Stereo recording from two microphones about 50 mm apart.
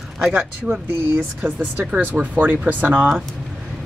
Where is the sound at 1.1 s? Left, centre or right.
Right.